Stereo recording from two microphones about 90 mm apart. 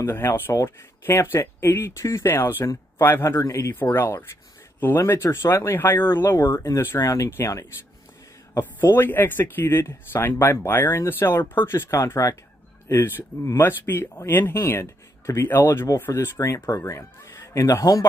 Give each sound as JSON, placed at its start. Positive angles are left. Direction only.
{"t": 0.0, "sound": "speech", "side_deg": 25}